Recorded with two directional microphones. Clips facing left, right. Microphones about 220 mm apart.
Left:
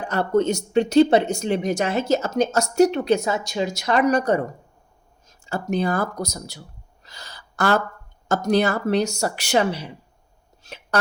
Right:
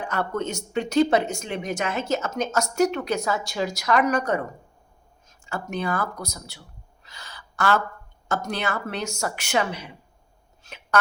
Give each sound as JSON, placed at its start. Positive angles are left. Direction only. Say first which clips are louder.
{"t": 0.1, "sound": "speech", "louder": "left 9 dB", "side_deg": 35}
{"t": 5.5, "sound": "speech", "louder": "left 5 dB", "side_deg": 35}
{"t": 7.0, "sound": "a sound", "louder": "left 2 dB", "side_deg": 40}
{"t": 8.3, "sound": "speech", "louder": "left 8 dB", "side_deg": 40}